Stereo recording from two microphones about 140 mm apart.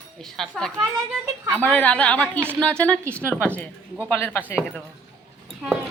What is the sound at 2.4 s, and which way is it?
Speech, 15° right (ahead or behind).